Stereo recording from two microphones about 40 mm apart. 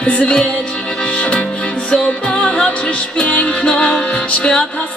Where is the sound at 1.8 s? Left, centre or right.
Left.